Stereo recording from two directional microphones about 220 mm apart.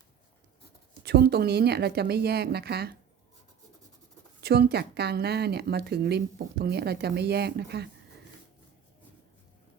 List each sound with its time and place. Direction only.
1.0 s speech: 45° right (ahead or behind)
4.4 s speech: 45° right (ahead or behind)